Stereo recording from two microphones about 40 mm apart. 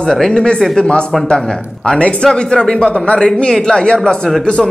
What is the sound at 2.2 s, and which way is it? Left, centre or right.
Speech, centre.